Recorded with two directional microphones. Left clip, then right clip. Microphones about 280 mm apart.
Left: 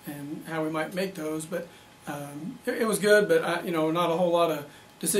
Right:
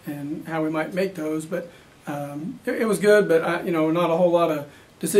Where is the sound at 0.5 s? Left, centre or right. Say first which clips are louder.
Right 4 dB; centre.